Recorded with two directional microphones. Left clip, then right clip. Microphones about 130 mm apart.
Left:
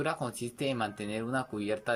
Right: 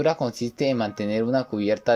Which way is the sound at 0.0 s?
45° right (ahead or behind).